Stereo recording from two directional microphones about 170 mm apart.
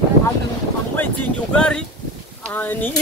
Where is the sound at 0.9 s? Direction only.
10° left (ahead or behind).